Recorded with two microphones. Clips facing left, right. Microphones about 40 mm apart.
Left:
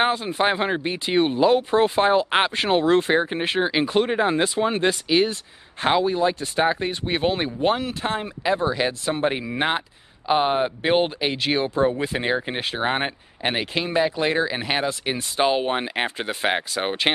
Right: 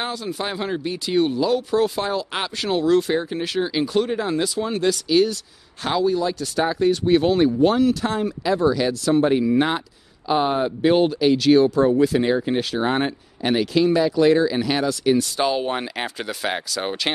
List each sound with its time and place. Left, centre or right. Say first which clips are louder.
0.0 s speech: left 6 dB; left